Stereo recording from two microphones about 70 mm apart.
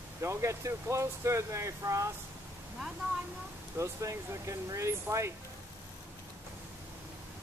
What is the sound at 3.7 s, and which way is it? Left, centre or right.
Speech, right.